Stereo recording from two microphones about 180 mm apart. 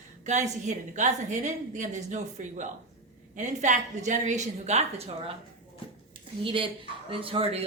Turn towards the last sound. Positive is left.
turn(degrees=-30)  # may be behind; listen again after turning